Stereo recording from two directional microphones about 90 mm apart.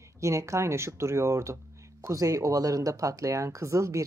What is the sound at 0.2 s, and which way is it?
Speech, 35° right (ahead or behind).